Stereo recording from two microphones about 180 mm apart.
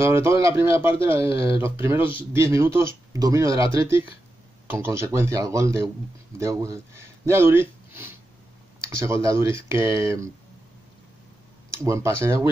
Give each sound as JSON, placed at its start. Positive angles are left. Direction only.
{"t": 0.0, "sound": "speech", "side_deg": -15}
{"t": 11.7, "sound": "speech", "side_deg": -15}